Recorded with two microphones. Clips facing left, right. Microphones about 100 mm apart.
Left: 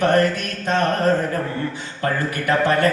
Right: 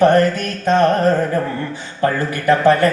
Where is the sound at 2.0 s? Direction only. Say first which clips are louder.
Right 5 dB; 30° right (ahead or behind).